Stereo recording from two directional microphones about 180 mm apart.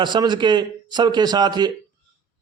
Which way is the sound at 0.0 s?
25° right (ahead or behind).